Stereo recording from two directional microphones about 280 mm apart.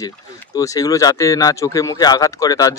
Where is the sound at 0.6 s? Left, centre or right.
Centre.